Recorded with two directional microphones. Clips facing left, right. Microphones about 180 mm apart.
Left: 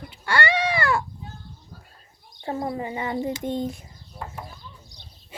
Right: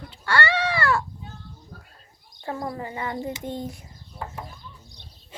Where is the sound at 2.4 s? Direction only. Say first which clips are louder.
Left 3 dB; 25° left (ahead or behind).